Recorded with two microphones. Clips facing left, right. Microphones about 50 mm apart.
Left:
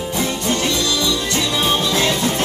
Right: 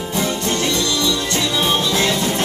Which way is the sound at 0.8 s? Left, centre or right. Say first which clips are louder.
Even; centre.